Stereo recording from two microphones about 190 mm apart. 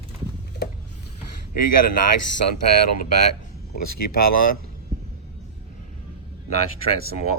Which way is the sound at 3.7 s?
50° left (ahead or behind).